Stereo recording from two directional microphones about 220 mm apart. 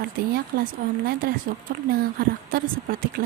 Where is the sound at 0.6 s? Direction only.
40° right (ahead or behind).